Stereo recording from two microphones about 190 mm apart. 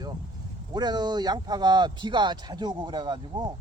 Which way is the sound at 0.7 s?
20° right (ahead or behind).